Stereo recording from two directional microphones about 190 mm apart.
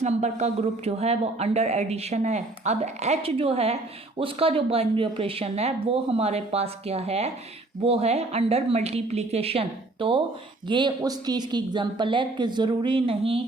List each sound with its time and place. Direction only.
0.0 s a woman's voice: 35° right (ahead or behind)